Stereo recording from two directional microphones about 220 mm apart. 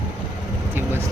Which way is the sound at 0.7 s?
10° right (ahead or behind).